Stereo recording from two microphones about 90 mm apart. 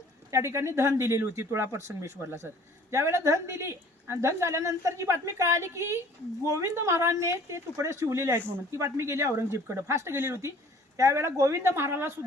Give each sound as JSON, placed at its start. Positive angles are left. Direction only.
{"t": 0.3, "sound": "a woman's voice", "side_deg": -35}